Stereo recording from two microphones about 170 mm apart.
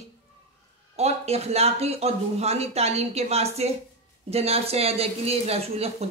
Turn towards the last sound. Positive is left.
turn(degrees=-40)  # may be behind; listen again after turning